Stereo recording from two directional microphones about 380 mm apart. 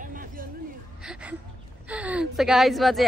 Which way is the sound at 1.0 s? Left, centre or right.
Centre.